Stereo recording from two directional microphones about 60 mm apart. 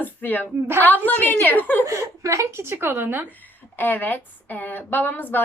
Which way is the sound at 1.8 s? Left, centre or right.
Right.